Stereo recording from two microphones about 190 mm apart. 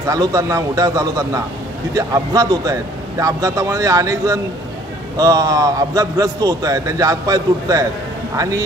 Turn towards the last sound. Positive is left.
turn(degrees=-20)  # may be behind; listen again after turning